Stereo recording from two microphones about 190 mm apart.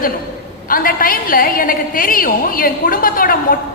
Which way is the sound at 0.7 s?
50° left (ahead or behind).